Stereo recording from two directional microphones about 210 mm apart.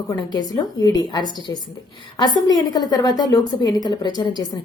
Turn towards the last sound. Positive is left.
turn(degrees=20)  # may be behind; listen again after turning